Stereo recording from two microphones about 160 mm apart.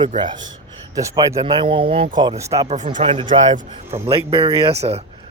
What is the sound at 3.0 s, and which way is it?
Speech, 35° right (ahead or behind).